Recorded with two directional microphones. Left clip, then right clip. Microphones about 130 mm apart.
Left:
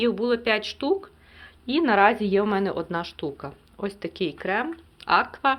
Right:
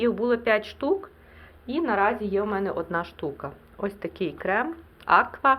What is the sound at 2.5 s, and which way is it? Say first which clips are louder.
Speech: left 2 dB; 90° left.